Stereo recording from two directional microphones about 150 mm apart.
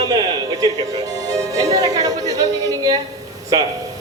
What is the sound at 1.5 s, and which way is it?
A man's voice, 25° right (ahead or behind).